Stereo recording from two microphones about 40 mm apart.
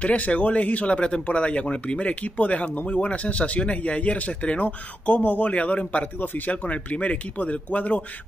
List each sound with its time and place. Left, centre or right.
0.0 s speech: left
6.1 s speech: left